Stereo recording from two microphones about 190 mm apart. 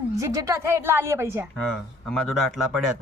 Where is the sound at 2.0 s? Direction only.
5° left (ahead or behind).